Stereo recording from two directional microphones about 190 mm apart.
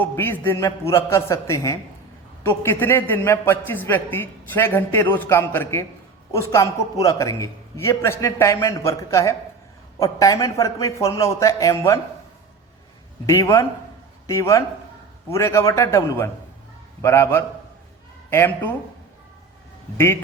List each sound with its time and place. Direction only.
0.0 s a man's voice: 10° left (ahead or behind)
13.2 s a man's voice: 15° left (ahead or behind)